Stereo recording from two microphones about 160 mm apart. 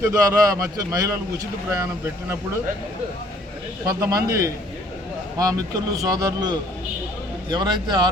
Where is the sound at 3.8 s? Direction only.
20° right (ahead or behind).